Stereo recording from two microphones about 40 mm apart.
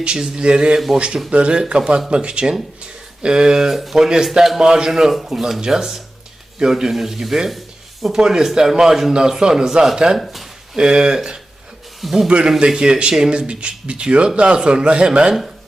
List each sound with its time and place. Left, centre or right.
0.2 s speech: right
3.7 s speech: centre
4.6 s speech: centre
4.9 s speech: centre
10.2 s a sound: centre
10.8 s speech: centre
12.0 s a man's voice: centre
12.5 s speech: right